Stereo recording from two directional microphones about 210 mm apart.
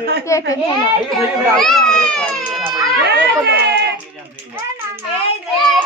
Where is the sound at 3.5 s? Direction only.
50° right (ahead or behind).